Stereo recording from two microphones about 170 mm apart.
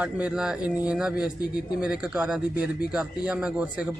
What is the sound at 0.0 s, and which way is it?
A man's voice, 5° right (ahead or behind).